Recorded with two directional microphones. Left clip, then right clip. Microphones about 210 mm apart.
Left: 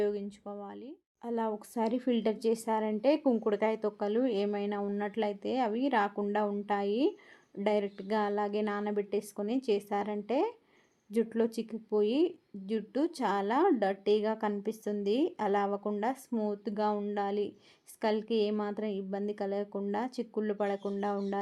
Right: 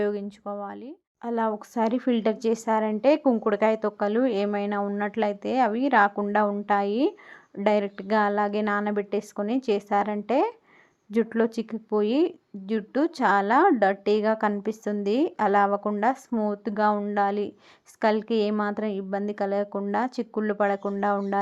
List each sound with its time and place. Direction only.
0.0 s a woman's voice: 20° right (ahead or behind)